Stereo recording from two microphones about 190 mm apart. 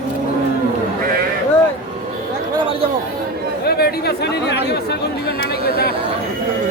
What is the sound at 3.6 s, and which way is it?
Speech, 55° left (ahead or behind).